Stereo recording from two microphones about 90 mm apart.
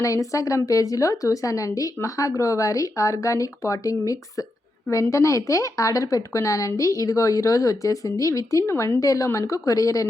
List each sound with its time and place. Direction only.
0.0 s a woman's voice: 35° left (ahead or behind)
9.0 s a woman's voice: 40° left (ahead or behind)